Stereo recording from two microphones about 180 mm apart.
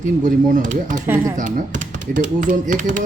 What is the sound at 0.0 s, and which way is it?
Speech, 45° right (ahead or behind).